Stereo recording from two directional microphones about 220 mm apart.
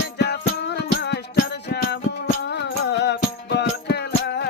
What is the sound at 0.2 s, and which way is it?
Music, 50° left (ahead or behind).